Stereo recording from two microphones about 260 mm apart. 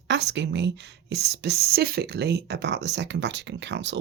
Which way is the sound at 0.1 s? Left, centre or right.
Right.